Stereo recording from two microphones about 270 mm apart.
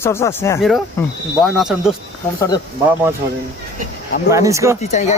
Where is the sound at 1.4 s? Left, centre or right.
Centre.